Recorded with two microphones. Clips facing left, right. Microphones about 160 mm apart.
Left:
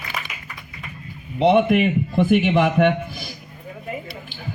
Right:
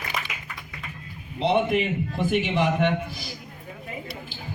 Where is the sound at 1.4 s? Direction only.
60° left (ahead or behind).